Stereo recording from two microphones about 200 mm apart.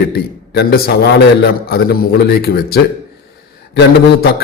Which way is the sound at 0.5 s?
50° left (ahead or behind).